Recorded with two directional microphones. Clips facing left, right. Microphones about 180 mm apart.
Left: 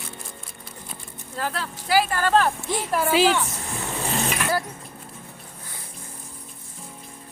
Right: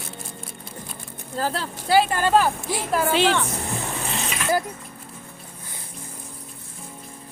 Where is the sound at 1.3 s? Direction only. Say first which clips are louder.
Right 3 dB; 30° right (ahead or behind).